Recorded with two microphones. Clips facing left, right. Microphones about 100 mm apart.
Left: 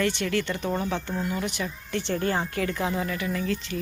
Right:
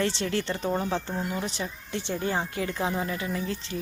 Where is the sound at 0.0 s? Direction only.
30° right (ahead or behind).